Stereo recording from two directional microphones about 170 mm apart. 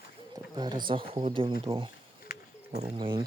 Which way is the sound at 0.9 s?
30° right (ahead or behind).